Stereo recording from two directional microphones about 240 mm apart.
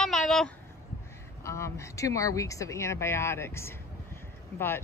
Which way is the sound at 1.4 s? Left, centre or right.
Centre.